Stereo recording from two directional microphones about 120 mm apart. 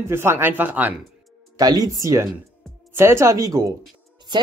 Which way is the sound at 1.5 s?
30° right (ahead or behind).